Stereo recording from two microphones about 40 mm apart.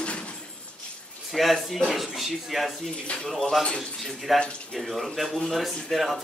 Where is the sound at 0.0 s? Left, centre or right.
Left.